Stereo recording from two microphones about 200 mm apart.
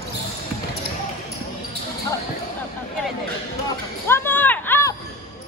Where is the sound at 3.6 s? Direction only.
10° left (ahead or behind).